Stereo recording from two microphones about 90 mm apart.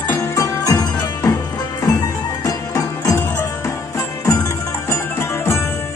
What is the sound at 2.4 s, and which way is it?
Music, 40° left (ahead or behind).